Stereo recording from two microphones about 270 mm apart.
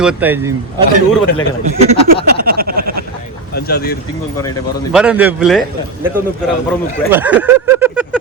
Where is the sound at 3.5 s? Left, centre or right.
Left.